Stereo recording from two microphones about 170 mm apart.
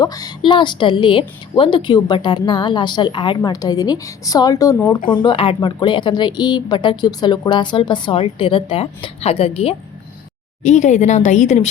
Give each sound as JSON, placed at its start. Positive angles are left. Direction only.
{"t": 0.0, "sound": "a woman's voice", "side_deg": 20}